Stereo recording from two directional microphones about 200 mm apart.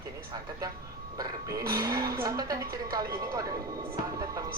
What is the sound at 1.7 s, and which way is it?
Speech, 15° right (ahead or behind).